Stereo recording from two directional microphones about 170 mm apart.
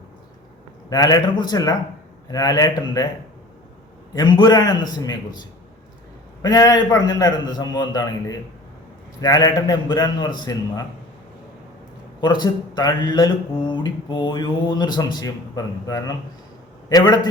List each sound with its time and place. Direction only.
0.9 s speech: 20° left (ahead or behind)
4.1 s speech: 25° left (ahead or behind)
6.4 s speech: 20° left (ahead or behind)
12.2 s speech: 25° left (ahead or behind)